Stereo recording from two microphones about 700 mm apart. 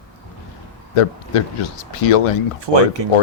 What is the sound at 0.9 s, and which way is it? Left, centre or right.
Speech, left.